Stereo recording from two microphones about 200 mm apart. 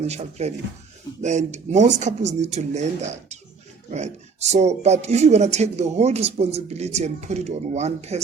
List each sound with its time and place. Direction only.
0.0 s speech: 35° right (ahead or behind)